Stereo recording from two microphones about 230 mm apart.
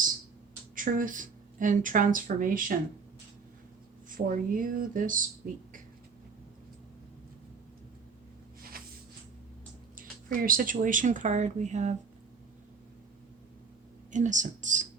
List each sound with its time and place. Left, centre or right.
0.8 s speech: right
4.1 s speech: right
8.7 s a sound: right
10.0 s speech: right
14.1 s speech: right